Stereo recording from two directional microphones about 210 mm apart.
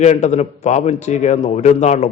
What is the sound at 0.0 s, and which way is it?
A man's voice, 35° left (ahead or behind).